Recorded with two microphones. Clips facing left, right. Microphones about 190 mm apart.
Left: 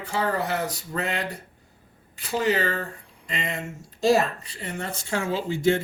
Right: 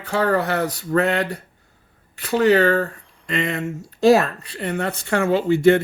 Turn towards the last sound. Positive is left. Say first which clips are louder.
# right 8 dB
turn(degrees=-65)  # may be behind; listen again after turning